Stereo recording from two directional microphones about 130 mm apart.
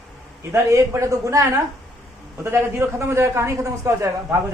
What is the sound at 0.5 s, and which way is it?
A man's voice, 20° right (ahead or behind).